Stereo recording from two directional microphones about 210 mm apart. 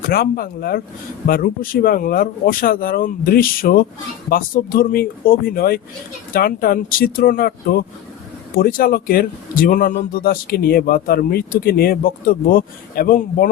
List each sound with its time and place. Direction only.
0.1 s speech: 45° left (ahead or behind)